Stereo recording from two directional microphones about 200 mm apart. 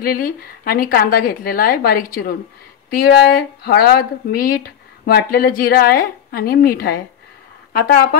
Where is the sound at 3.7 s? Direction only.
50° left (ahead or behind).